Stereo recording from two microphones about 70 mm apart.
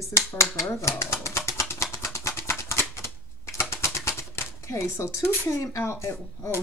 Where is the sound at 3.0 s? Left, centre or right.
Left.